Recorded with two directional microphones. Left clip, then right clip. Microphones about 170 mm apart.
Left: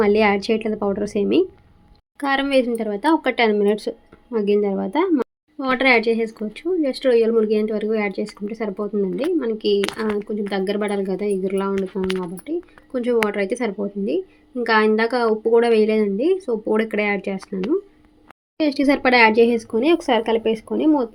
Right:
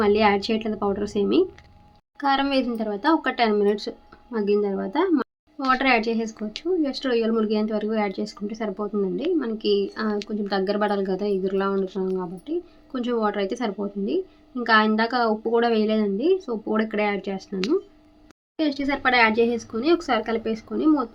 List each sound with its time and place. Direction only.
0.0 s a woman's voice: 25° left (ahead or behind)